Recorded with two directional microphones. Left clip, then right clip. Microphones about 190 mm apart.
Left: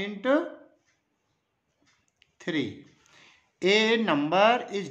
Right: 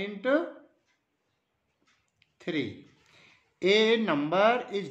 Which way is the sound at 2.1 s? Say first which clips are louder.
Left 2 dB; 20° left (ahead or behind).